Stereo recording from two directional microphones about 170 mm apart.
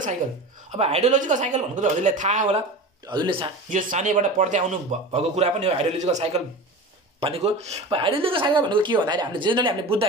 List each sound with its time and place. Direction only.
0.7 s a man's voice: 35° right (ahead or behind)
3.1 s speech: 30° right (ahead or behind)
3.7 s a man's voice: 45° right (ahead or behind); by 10.0 s 30° right (ahead or behind)